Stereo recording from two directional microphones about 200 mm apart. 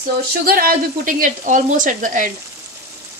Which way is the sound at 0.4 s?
50° right (ahead or behind).